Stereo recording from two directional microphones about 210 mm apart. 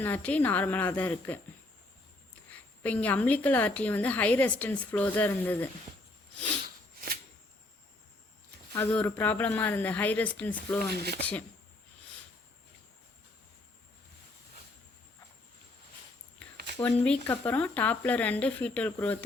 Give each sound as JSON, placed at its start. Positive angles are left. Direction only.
{"t": 0.0, "sound": "a woman's voice", "side_deg": 10}
{"t": 2.5, "sound": "a woman's voice", "side_deg": 5}
{"t": 8.7, "sound": "a woman's voice", "side_deg": 10}
{"t": 10.8, "sound": "speech", "side_deg": -50}
{"t": 16.4, "sound": "a sound", "side_deg": 5}
{"t": 16.7, "sound": "a woman's voice", "side_deg": 10}